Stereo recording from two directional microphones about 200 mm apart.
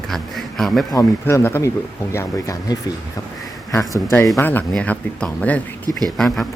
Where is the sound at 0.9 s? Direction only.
15° left (ahead or behind).